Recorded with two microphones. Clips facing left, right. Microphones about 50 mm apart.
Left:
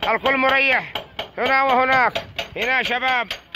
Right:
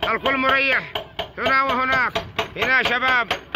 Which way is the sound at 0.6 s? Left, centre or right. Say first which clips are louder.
Left 2 dB; left.